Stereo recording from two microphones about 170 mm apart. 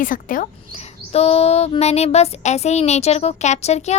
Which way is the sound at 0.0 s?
50° left (ahead or behind).